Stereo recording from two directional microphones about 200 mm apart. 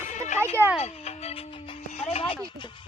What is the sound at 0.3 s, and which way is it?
Speech, 10° right (ahead or behind).